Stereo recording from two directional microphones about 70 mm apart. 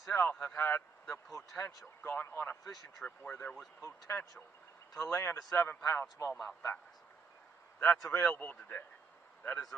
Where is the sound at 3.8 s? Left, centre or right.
Left.